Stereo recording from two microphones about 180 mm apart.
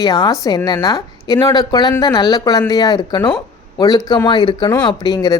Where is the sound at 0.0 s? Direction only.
20° left (ahead or behind).